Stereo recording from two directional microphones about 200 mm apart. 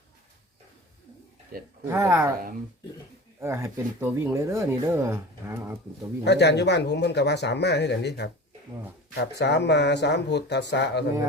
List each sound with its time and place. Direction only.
1.8 s speech: 15° right (ahead or behind)
3.4 s speech: 15° right (ahead or behind)
6.2 s speech: 55° left (ahead or behind)